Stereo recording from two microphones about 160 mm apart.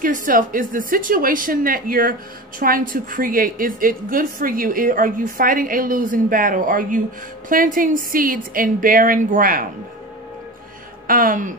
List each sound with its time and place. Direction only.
0.0 s a woman's voice: 55° right (ahead or behind)
11.1 s a woman's voice: 60° right (ahead or behind)